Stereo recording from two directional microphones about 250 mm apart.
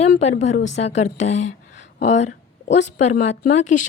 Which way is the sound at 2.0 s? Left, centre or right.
Left.